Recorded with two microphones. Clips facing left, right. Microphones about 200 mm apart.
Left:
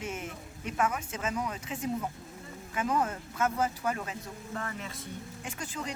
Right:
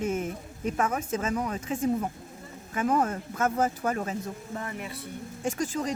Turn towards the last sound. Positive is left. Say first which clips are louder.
# right 10 dB
turn(degrees=-45)  # may be behind; listen again after turning